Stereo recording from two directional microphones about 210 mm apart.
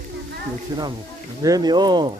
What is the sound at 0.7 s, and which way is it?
Speech, 20° right (ahead or behind).